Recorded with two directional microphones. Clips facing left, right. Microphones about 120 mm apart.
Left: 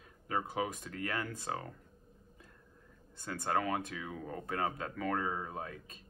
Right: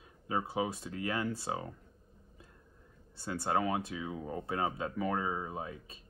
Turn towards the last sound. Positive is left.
turn(degrees=-15)  # may be behind; listen again after turning